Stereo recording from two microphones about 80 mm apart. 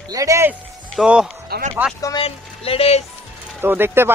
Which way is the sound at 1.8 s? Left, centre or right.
Centre.